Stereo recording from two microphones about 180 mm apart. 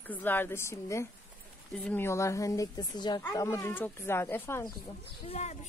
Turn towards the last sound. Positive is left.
turn(degrees=35)  # may be behind; listen again after turning